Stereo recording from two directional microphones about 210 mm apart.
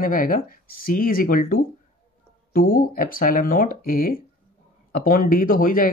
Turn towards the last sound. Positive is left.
turn(degrees=40)  # may be behind; listen again after turning